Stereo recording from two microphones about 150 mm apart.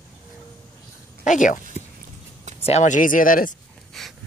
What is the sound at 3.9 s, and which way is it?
Dog, centre (ahead or behind).